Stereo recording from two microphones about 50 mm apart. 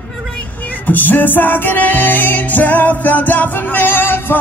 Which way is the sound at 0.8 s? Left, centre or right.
Left.